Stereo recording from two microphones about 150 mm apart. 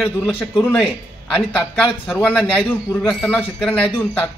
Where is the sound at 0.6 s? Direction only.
5° left (ahead or behind).